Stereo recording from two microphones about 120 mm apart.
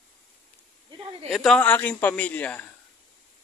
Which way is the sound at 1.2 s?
Centre (ahead or behind).